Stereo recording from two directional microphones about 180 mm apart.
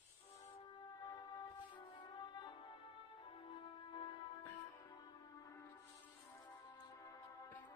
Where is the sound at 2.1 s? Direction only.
25° left (ahead or behind).